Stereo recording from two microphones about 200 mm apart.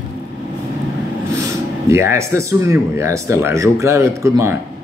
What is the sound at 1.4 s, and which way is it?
Speech, 15° right (ahead or behind).